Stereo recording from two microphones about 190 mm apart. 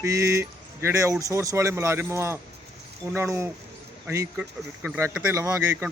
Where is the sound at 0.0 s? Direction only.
15° right (ahead or behind).